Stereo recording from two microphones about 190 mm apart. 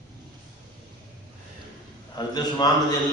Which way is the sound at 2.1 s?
20° left (ahead or behind).